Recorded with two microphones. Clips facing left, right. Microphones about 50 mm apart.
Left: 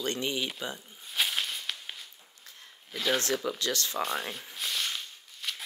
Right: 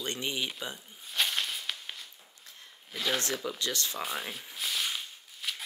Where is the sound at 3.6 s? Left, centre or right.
Right.